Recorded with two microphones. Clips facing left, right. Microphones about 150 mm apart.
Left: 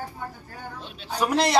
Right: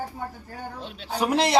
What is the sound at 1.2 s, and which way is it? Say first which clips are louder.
Speech: even; 25° right (ahead or behind).